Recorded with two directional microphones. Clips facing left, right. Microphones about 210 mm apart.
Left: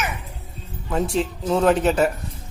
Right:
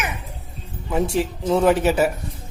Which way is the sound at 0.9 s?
10° right (ahead or behind).